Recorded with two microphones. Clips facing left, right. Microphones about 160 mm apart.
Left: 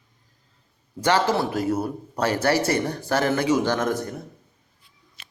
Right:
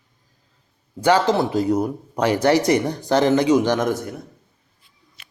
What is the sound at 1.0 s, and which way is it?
Speech, 15° right (ahead or behind).